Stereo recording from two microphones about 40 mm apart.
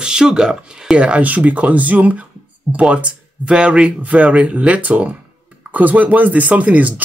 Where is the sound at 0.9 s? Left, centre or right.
Right.